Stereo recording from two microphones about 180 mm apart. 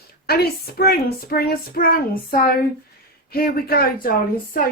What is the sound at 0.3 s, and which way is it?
Speech, 60° left (ahead or behind).